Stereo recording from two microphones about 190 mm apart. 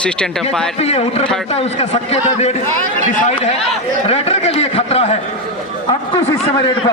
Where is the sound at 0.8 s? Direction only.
30° left (ahead or behind).